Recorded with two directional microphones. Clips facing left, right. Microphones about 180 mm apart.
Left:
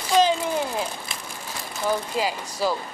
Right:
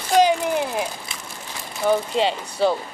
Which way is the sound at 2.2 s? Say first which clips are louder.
Right 3 dB; 25° right (ahead or behind).